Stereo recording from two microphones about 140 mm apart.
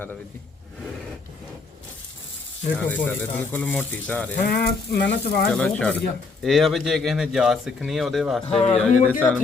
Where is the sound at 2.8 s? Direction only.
15° left (ahead or behind).